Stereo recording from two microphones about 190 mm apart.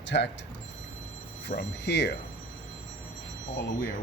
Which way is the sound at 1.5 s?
60° left (ahead or behind).